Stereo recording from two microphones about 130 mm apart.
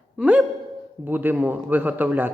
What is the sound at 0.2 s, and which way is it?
A man's voice, 10° right (ahead or behind).